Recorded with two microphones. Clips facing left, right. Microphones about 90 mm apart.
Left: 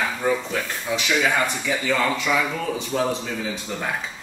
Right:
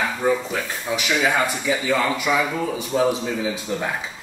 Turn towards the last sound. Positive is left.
turn(degrees=-5)  # may be behind; listen again after turning